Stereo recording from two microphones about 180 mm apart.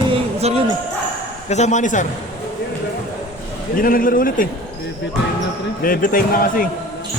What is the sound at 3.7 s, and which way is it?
Speech, 50° left (ahead or behind).